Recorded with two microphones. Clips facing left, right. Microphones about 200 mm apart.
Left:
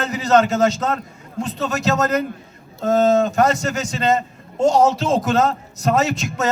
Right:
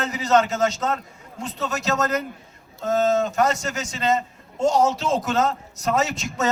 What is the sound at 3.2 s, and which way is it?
Speech, 60° left (ahead or behind).